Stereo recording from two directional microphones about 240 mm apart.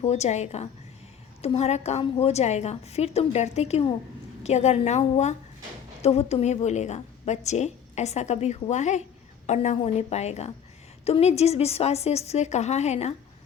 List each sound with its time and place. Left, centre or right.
0.0 s a woman's voice: left